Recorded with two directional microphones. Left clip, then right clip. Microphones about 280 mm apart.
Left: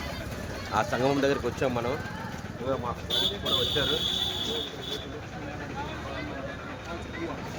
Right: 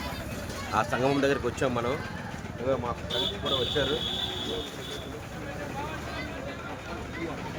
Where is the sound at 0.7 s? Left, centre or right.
Centre.